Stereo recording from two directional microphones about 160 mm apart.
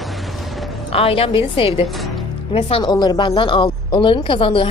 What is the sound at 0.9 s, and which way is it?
Speech, 35° left (ahead or behind).